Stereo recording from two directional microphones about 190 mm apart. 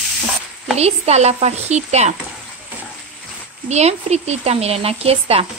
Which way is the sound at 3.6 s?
35° right (ahead or behind).